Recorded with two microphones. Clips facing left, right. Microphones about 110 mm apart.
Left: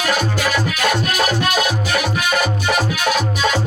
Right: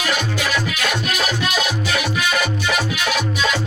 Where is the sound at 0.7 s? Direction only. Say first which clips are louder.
Left 4 dB; 45° left (ahead or behind).